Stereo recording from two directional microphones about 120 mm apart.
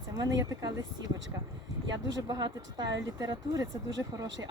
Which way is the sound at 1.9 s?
35° right (ahead or behind).